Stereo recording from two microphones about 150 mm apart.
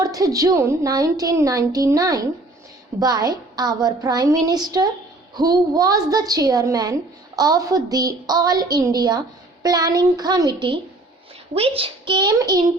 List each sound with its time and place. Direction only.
0.0 s a woman's voice: 25° right (ahead or behind)
11.5 s a woman's voice: 40° right (ahead or behind)